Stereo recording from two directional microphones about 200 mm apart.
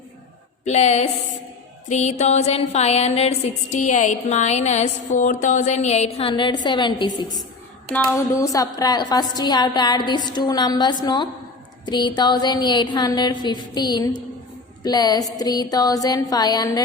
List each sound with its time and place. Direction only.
0.6 s a woman's voice: 35° left (ahead or behind)
1.9 s a sound: 35° left (ahead or behind)
7.9 s a woman's voice: 10° left (ahead or behind)